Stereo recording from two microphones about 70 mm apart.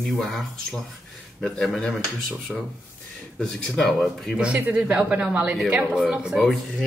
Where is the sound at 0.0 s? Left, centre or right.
Centre.